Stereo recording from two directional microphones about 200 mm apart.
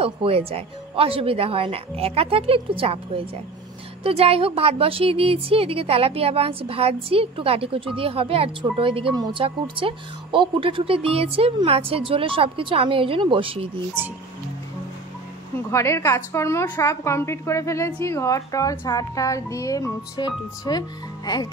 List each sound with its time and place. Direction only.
0.0 s a woman's voice: 30° right (ahead or behind)
15.7 s a woman's voice: 15° left (ahead or behind)